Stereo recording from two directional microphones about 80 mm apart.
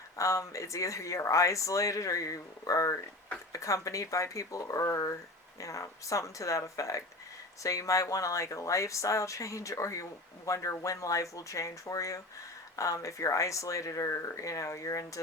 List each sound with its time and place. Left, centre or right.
0.2 s speech: left